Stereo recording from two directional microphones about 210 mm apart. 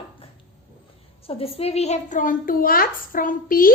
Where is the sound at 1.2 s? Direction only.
25° left (ahead or behind).